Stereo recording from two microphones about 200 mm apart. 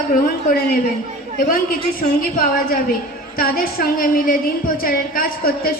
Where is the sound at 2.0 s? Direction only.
45° left (ahead or behind).